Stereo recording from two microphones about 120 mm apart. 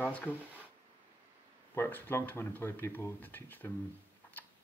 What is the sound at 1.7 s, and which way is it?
Speech, 15° left (ahead or behind).